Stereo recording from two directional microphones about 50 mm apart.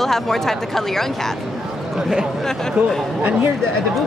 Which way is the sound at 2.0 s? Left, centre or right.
Centre.